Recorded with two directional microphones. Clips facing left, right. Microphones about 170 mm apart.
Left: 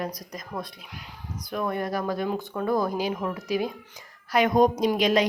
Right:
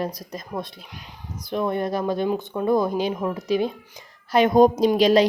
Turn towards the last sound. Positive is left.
turn(degrees=-30)  # may be behind; listen again after turning